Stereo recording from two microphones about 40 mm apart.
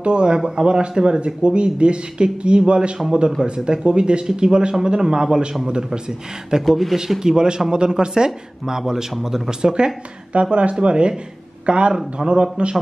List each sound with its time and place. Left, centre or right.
0.0 s speech: right
10.3 s speech: right